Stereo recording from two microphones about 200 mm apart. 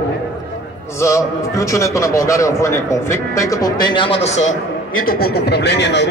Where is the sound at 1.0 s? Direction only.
15° left (ahead or behind).